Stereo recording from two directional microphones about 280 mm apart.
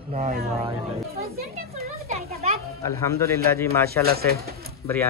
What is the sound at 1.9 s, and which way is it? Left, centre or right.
Speech, right.